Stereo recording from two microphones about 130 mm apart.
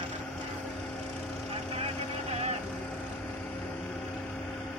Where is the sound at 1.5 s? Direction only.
50° right (ahead or behind).